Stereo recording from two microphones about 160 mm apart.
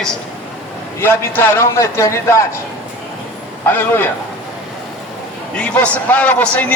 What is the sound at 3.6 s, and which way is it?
Speech, 15° left (ahead or behind).